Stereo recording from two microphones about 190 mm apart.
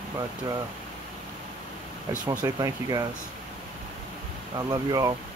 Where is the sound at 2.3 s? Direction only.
20° right (ahead or behind).